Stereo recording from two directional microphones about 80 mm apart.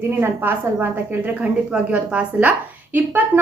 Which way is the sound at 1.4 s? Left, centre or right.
Centre.